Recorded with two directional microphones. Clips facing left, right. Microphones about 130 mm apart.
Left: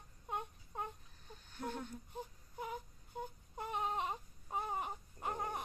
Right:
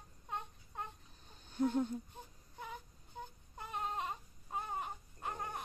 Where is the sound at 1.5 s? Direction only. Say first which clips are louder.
Right 10 dB; 20° right (ahead or behind).